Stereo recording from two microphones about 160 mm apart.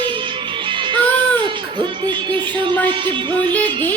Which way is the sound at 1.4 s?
30° right (ahead or behind).